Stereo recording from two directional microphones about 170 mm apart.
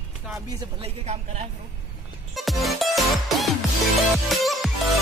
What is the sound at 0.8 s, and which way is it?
Speech, 40° right (ahead or behind).